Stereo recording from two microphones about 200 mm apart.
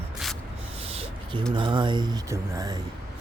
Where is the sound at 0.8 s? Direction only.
25° right (ahead or behind).